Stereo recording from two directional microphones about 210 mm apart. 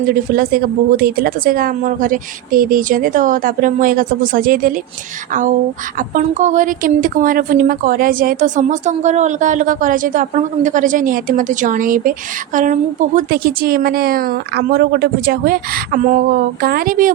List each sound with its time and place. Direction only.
0.1 s a woman's voice: 45° right (ahead or behind)
6.0 s a woman's voice: 35° right (ahead or behind)